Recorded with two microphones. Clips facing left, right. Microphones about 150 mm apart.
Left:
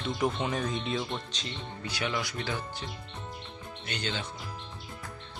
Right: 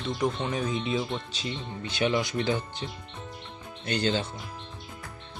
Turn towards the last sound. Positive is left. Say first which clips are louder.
# right 8 dB
turn(degrees=-35)  # may be behind; listen again after turning